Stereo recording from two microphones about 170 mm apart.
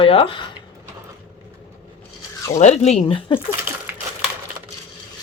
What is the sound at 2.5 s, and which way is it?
Speech, 40° left (ahead or behind).